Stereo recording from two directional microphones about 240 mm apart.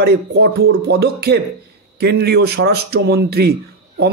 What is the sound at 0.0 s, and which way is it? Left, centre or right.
A man's voice, right.